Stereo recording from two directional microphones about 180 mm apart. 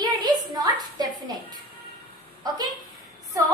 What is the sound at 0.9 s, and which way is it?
Music, 20° right (ahead or behind).